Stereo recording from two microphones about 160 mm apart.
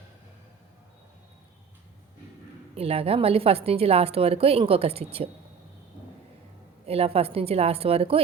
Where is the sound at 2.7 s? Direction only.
40° right (ahead or behind).